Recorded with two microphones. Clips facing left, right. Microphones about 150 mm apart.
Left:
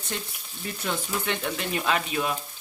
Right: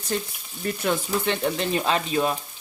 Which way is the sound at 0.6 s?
55° right (ahead or behind).